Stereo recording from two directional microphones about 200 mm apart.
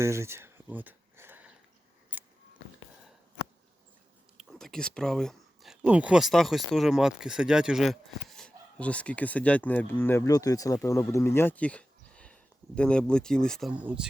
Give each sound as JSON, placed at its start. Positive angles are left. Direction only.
{"t": 0.0, "sound": "a sound", "side_deg": -15}
{"t": 2.1, "sound": "scissors", "side_deg": -5}
{"t": 4.4, "sound": "speech", "side_deg": 0}